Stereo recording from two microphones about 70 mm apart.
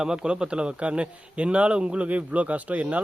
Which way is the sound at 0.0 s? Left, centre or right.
Centre.